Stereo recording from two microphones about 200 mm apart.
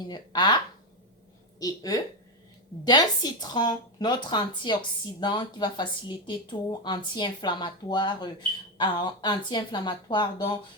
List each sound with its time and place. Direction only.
0.0 s speech: 20° left (ahead or behind)